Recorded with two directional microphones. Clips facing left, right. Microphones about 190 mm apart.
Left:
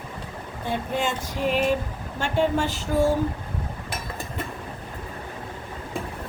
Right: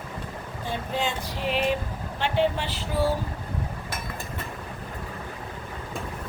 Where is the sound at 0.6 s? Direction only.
50° left (ahead or behind).